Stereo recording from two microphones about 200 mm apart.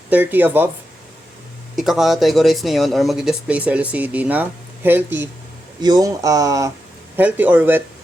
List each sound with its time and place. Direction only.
0.1 s speech: 10° right (ahead or behind)
1.7 s speech: centre (ahead or behind)